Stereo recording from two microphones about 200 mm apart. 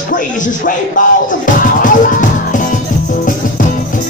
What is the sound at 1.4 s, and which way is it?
Music, 40° left (ahead or behind).